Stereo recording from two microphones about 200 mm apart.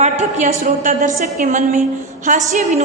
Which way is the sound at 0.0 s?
35° right (ahead or behind).